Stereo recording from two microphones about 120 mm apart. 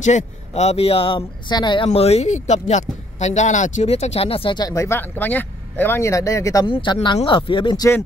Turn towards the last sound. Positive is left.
turn(degrees=45)  # may be behind; listen again after turning